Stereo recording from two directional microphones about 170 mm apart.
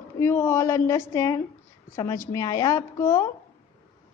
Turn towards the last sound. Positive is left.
turn(degrees=15)  # may be behind; listen again after turning